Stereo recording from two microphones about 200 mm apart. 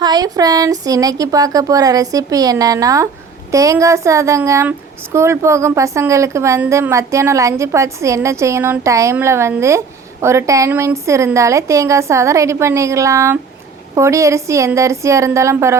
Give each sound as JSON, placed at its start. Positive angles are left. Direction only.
{"t": 0.0, "sound": "a woman's voice", "side_deg": -20}